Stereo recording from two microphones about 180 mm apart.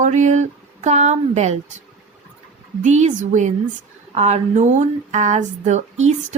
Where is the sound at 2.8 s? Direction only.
40° right (ahead or behind).